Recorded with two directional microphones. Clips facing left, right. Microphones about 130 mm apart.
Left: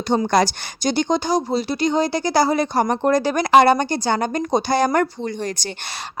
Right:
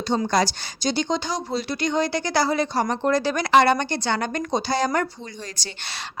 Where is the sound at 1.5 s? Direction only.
30° left (ahead or behind); by 5.6 s 55° left (ahead or behind).